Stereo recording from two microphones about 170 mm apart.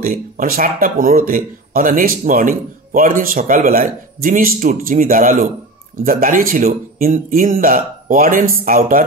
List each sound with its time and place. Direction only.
0.0 s speech: 55° right (ahead or behind)